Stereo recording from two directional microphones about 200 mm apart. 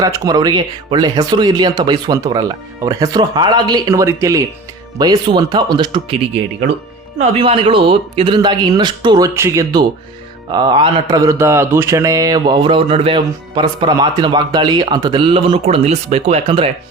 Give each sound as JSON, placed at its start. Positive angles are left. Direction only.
{"t": 0.0, "sound": "speech", "side_deg": -20}
{"t": 7.2, "sound": "speech", "side_deg": -30}